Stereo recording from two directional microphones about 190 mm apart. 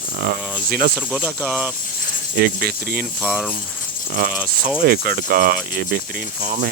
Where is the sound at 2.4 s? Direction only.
55° right (ahead or behind).